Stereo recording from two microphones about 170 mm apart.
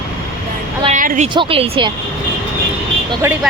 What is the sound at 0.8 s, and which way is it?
Speech, 50° right (ahead or behind).